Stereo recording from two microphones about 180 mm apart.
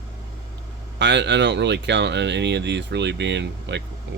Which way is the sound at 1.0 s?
70° right (ahead or behind).